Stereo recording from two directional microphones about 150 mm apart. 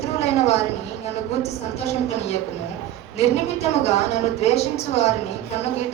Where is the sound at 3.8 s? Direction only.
45° left (ahead or behind).